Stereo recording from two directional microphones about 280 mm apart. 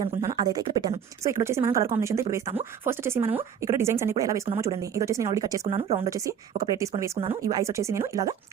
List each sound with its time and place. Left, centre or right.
0.0 s speech: centre